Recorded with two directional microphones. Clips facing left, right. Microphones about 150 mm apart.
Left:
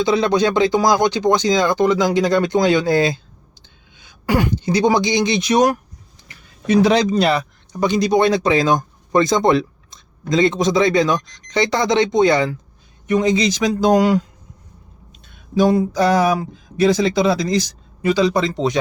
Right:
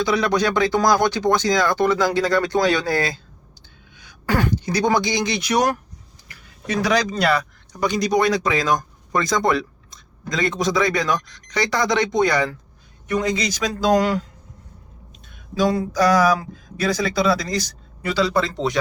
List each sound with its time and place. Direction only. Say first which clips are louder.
0.0 s a man's voice: left 4 dB; 25° left (ahead or behind)
15.5 s speech: left 4 dB; 20° left (ahead or behind)